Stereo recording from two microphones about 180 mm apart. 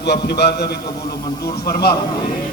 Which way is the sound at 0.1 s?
65° left (ahead or behind).